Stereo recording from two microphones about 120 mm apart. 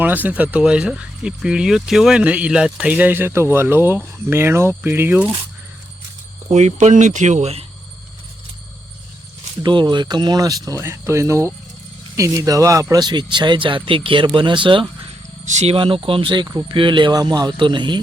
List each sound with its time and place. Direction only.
0.0 s speech: 15° right (ahead or behind)
6.5 s speech: 70° right (ahead or behind)
9.8 s speech: 35° right (ahead or behind)
15.4 s speech: 75° right (ahead or behind)
15.7 s speech: 50° right (ahead or behind)